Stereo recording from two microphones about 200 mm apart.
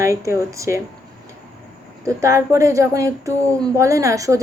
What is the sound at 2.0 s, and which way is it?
Speech, 15° right (ahead or behind).